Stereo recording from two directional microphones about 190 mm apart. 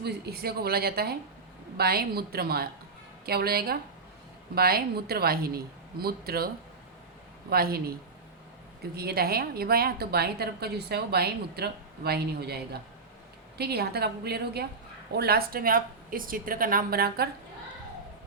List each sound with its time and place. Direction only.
0.0 s a woman's voice: 60° right (ahead or behind)
7.5 s a woman's voice: 50° right (ahead or behind)